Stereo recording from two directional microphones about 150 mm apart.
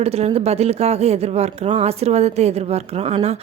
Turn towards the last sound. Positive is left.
turn(degrees=-45)  # may be behind; listen again after turning